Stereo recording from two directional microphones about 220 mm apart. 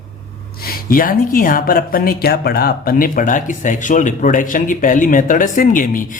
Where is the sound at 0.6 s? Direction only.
40° left (ahead or behind).